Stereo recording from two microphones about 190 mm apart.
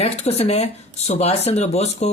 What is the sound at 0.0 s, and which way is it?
Speech, 35° left (ahead or behind).